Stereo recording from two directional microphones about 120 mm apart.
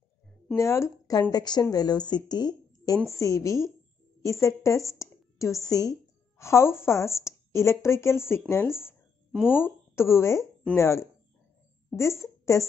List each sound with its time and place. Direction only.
0.6 s a woman's voice: 25° left (ahead or behind)
9.3 s speech: 5° right (ahead or behind)
9.6 s a woman's voice: 20° left (ahead or behind)